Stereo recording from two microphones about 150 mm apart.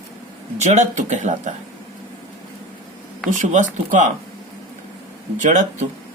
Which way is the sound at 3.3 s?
55° right (ahead or behind).